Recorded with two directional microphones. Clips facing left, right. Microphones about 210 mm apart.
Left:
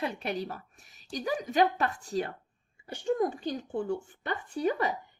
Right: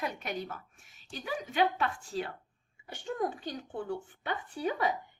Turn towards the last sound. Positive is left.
turn(degrees=40)  # may be behind; listen again after turning